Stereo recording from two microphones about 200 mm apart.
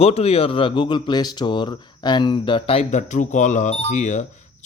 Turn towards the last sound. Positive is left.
turn(degrees=35)  # may be behind; listen again after turning